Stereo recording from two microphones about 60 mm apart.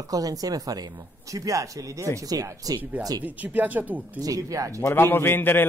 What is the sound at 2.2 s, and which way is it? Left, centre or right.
Speech, right.